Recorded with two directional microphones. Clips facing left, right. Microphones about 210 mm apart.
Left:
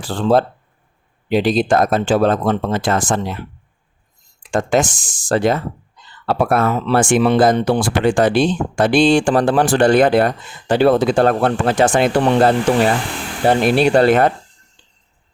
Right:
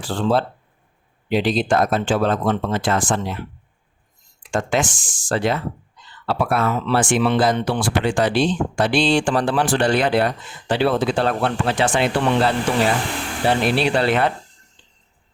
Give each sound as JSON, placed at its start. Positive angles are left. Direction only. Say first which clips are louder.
{"t": 0.0, "sound": "speech", "louder": "left 4 dB", "side_deg": 45}
{"t": 4.5, "sound": "speech", "louder": "left 5 dB", "side_deg": 40}